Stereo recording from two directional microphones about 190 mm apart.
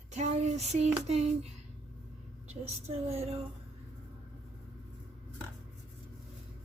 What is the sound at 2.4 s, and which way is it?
Child singing, 35° right (ahead or behind).